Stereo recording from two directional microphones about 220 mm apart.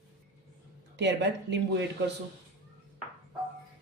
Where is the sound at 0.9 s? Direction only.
50° right (ahead or behind).